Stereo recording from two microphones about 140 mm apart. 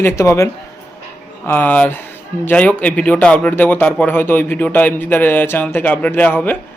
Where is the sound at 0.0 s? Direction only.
20° left (ahead or behind).